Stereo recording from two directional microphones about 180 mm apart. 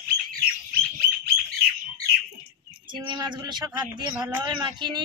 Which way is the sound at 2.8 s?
25° right (ahead or behind).